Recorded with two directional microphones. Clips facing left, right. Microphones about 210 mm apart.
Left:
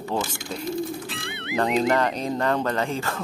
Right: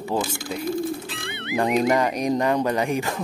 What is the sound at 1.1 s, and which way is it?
Speech, centre (ahead or behind).